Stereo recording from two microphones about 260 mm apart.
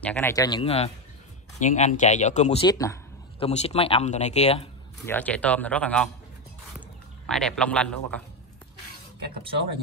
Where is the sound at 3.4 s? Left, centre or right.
Left.